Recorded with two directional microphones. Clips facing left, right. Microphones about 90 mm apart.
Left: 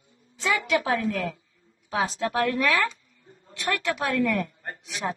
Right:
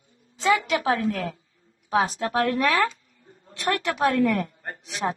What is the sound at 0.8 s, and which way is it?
A woman's voice, 35° right (ahead or behind).